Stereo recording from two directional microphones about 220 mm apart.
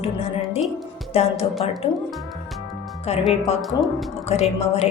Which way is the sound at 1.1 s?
25° left (ahead or behind).